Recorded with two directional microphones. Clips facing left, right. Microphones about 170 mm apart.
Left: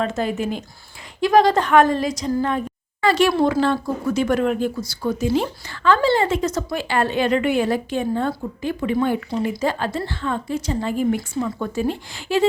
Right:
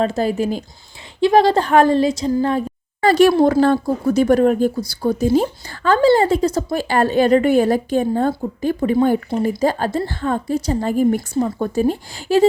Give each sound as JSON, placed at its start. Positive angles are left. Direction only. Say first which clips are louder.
{"t": 0.0, "sound": "a woman's voice", "louder": "right 4 dB", "side_deg": -35}